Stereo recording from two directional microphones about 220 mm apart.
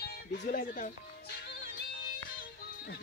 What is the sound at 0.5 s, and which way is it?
Speech, 35° left (ahead or behind).